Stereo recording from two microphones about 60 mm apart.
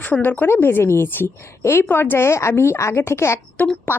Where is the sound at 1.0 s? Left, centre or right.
Left.